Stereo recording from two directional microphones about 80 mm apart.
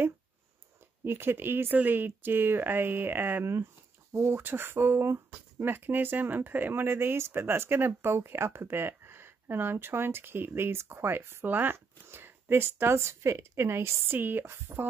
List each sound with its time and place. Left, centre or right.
1.0 s speech: right